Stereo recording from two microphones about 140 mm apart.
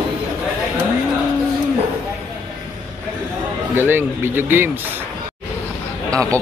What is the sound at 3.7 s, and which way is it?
Speech, 15° right (ahead or behind).